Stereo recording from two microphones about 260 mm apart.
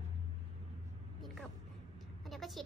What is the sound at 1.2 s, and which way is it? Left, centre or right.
A woman's voice, centre.